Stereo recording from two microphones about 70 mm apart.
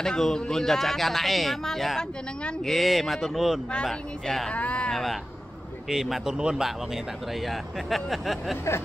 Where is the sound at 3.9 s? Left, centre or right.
Centre.